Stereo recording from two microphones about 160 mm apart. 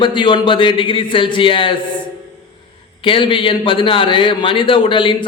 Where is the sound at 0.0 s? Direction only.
30° left (ahead or behind).